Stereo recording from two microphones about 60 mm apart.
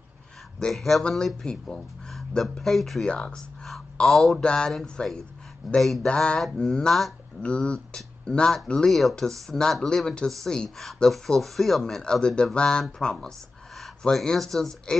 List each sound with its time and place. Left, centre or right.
0.6 s speech: centre
3.1 s speech: centre
5.6 s speech: centre
6.0 s speech: centre
8.9 s speech: centre
12.0 s speech: centre